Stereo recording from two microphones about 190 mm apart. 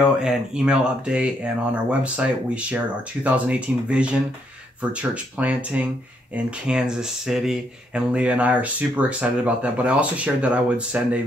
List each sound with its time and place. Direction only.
0.2 s speech: 5° right (ahead or behind)